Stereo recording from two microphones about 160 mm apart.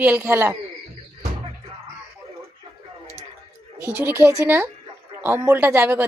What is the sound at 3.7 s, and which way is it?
A woman's voice, 15° right (ahead or behind).